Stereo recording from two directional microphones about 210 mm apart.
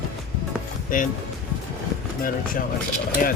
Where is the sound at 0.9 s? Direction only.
40° left (ahead or behind).